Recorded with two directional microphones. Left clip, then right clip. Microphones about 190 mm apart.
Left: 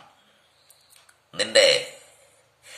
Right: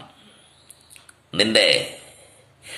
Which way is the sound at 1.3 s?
15° left (ahead or behind).